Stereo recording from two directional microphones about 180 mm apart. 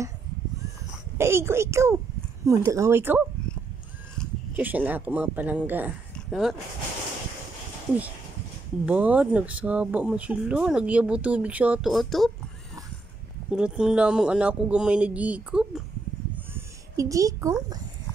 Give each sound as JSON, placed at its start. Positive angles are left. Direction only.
{"t": 1.1, "sound": "speech", "side_deg": -15}
{"t": 4.6, "sound": "speech", "side_deg": -10}
{"t": 6.1, "sound": "a sound", "side_deg": 0}
{"t": 8.8, "sound": "speech", "side_deg": -5}
{"t": 13.5, "sound": "speech", "side_deg": -5}
{"t": 16.5, "sound": "a sound", "side_deg": -20}